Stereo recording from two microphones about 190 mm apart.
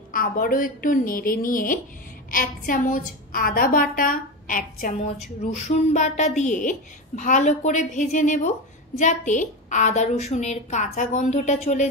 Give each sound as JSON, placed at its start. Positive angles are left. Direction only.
{"t": 0.1, "sound": "a woman's voice", "side_deg": 50}